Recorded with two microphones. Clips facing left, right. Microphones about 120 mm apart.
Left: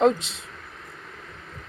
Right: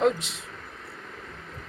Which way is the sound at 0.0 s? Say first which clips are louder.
Left 4 dB; 25° left (ahead or behind).